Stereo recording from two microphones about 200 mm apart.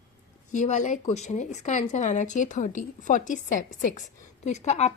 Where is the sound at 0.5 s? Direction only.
35° left (ahead or behind).